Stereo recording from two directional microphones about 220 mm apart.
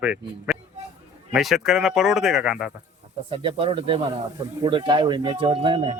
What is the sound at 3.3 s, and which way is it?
Speech, 25° right (ahead or behind).